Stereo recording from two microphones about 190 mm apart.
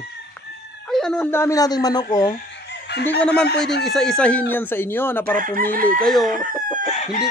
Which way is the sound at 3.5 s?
60° left (ahead or behind).